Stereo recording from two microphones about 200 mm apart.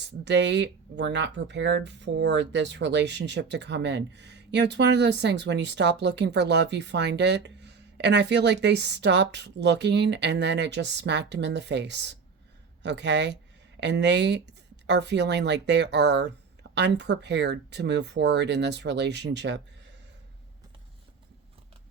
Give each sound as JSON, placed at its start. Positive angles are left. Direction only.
{"t": 0.3, "sound": "speech", "side_deg": -60}